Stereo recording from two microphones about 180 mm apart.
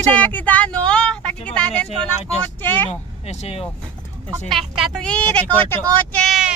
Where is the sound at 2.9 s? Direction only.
40° left (ahead or behind).